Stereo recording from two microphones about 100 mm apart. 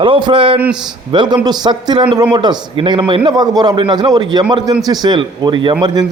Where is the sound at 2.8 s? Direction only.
60° right (ahead or behind).